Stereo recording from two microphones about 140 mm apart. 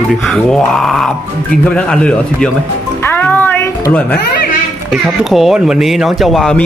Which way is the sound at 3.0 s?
15° left (ahead or behind).